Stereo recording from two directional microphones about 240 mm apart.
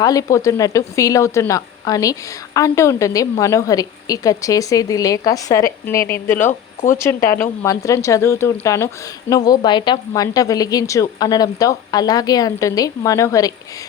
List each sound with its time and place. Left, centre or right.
0.0 s a woman's voice: centre
6.5 s speech: left
7.0 s a woman's voice: centre